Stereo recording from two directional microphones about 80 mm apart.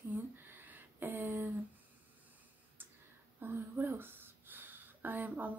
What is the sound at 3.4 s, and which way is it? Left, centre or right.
Speech, right.